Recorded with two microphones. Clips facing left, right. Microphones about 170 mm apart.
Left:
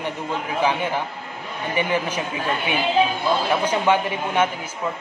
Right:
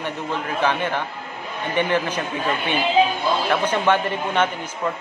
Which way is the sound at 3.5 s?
10° left (ahead or behind).